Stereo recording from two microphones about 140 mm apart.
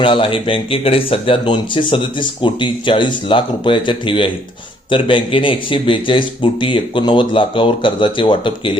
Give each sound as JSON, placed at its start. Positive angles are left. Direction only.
{"t": 0.0, "sound": "speech", "side_deg": 40}